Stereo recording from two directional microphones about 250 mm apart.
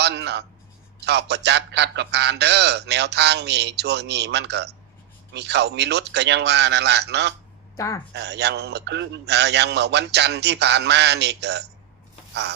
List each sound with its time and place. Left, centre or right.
0.0 s a man's voice: right
7.8 s speech: centre
8.1 s a man's voice: right
12.3 s a sound: right